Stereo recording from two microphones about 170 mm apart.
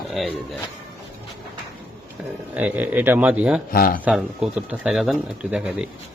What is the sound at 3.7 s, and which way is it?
Speech, 60° left (ahead or behind).